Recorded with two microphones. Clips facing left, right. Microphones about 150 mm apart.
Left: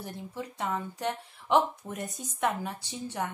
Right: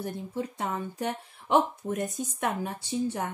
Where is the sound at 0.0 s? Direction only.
50° right (ahead or behind).